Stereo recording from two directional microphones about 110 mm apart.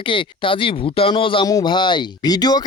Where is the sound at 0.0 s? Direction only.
50° left (ahead or behind).